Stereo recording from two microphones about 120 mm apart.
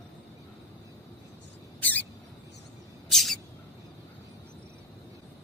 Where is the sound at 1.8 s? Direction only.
15° left (ahead or behind).